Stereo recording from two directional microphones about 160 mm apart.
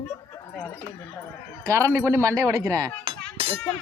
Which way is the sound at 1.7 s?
20° right (ahead or behind).